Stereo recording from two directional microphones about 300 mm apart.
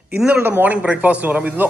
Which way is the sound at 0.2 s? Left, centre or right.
Centre.